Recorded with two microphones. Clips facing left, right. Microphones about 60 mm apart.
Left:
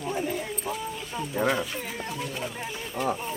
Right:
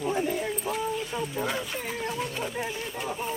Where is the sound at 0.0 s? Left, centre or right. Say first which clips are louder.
Right 2 dB; centre.